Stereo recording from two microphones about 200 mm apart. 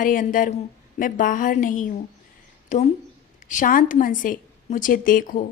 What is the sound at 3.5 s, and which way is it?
A woman's voice, 40° left (ahead or behind).